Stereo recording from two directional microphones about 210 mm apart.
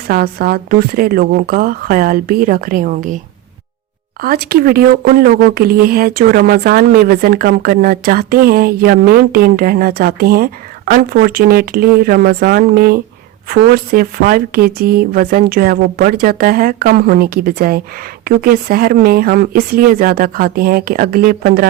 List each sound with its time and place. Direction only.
0.1 s speech: 45° right (ahead or behind)
4.2 s speech: 45° right (ahead or behind)